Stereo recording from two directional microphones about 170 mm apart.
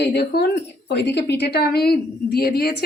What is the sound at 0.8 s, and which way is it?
A woman's voice, 85° left.